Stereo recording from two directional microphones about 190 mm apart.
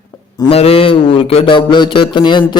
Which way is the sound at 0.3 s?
30° left (ahead or behind).